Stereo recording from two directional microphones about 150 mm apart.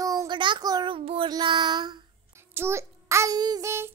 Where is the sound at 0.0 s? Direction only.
25° right (ahead or behind).